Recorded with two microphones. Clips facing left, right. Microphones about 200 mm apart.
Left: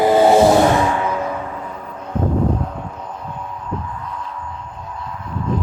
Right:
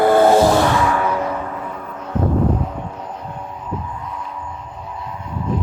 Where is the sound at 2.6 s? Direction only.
5° right (ahead or behind).